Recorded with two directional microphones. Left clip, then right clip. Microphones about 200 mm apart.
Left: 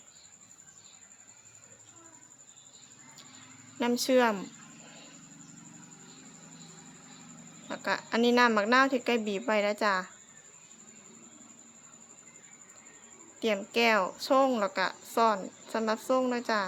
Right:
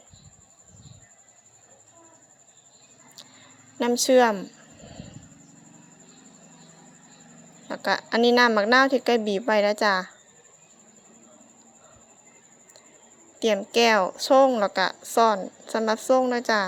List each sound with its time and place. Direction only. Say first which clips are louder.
3.8 s a woman's voice: right 7 dB; 25° right (ahead or behind)
7.7 s a woman's voice: right 6 dB; 25° right (ahead or behind)
13.4 s a woman's voice: right 7 dB; 30° right (ahead or behind)